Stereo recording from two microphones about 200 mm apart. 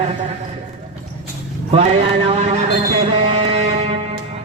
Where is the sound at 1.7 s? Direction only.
30° right (ahead or behind).